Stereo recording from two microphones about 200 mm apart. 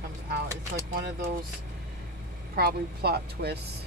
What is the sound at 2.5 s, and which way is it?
Speech, 50° right (ahead or behind).